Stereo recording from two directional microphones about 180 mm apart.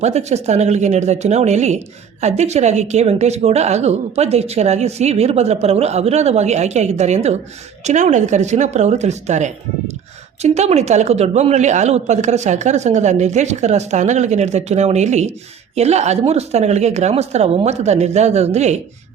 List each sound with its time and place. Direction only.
0.0 s a woman's voice: 40° right (ahead or behind)